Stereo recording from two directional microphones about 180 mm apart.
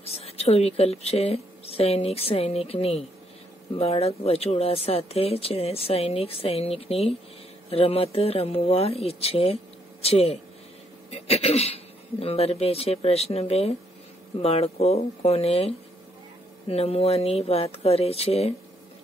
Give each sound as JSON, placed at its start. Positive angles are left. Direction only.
{"t": 0.0, "sound": "speech", "side_deg": 35}